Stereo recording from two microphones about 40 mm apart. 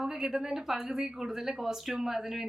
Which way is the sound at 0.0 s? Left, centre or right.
Centre.